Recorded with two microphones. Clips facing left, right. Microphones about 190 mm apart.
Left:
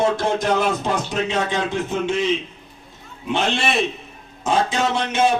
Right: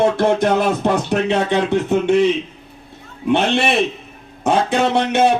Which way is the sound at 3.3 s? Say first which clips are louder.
Right 5 dB; 60° right (ahead or behind).